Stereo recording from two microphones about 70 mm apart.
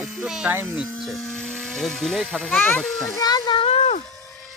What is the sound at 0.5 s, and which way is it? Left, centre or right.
Speech, right.